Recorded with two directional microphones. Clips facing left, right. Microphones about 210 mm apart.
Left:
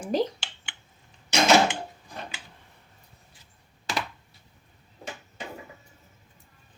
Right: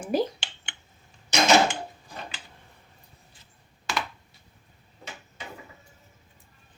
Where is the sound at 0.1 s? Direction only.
10° right (ahead or behind).